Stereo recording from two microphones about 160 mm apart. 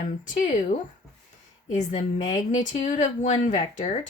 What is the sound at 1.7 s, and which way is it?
Speech, 50° left (ahead or behind).